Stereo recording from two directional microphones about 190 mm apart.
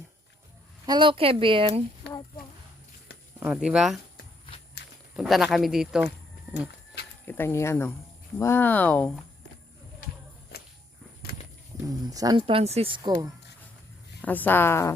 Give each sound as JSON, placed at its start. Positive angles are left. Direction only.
{"t": 0.9, "sound": "speech", "side_deg": -25}
{"t": 3.4, "sound": "speech", "side_deg": -5}
{"t": 5.1, "sound": "speech", "side_deg": 0}
{"t": 7.3, "sound": "speech", "side_deg": 10}
{"t": 11.9, "sound": "speech", "side_deg": -20}
{"t": 12.5, "sound": "speech", "side_deg": -30}
{"t": 14.2, "sound": "speech", "side_deg": 10}